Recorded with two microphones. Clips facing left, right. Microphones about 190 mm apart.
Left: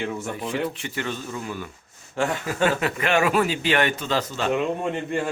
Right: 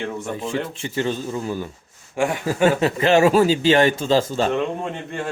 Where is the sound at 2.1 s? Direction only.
10° right (ahead or behind).